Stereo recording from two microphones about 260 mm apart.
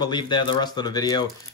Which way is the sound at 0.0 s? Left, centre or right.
Centre.